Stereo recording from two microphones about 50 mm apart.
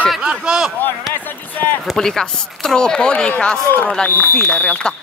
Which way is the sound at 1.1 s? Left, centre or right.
Left.